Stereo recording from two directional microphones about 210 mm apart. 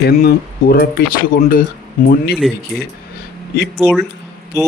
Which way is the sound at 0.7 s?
45° left (ahead or behind).